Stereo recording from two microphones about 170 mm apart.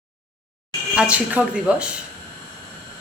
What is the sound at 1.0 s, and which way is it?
Speech, 5° right (ahead or behind).